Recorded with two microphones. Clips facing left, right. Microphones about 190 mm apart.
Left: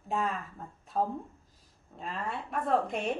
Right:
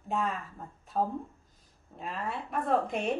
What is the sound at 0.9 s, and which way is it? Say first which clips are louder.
A woman's voice: even; centre (ahead or behind).